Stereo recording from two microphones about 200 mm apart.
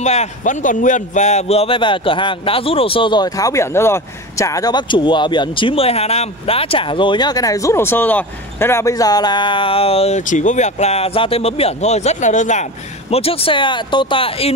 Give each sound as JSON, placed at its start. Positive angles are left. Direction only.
{"t": 0.0, "sound": "a man's voice", "side_deg": 35}